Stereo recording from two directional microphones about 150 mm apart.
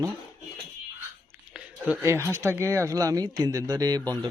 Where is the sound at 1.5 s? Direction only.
10° right (ahead or behind).